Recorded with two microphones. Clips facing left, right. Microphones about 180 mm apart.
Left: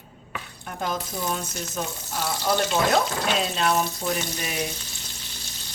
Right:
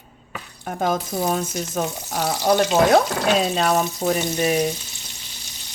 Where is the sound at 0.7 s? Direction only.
50° right (ahead or behind).